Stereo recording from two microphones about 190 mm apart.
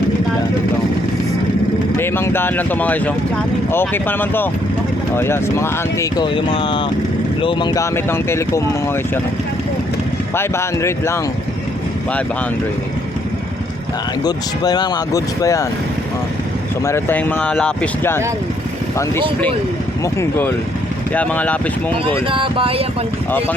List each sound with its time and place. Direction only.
2.0 s speech: 10° left (ahead or behind)
6.2 s speech: 30° left (ahead or behind)
10.3 s speech: 15° left (ahead or behind)
14.3 s speech: 20° left (ahead or behind)
16.8 s speech: 10° left (ahead or behind)
21.1 s speech: 10° left (ahead or behind)
22.3 s speech: 25° right (ahead or behind)